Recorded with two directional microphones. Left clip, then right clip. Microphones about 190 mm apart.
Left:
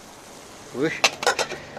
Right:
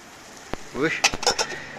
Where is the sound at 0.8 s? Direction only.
5° left (ahead or behind).